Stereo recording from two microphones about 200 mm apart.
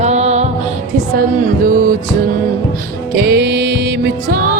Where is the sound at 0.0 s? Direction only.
35° right (ahead or behind).